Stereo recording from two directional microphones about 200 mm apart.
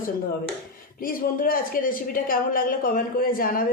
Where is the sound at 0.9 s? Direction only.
45° left (ahead or behind).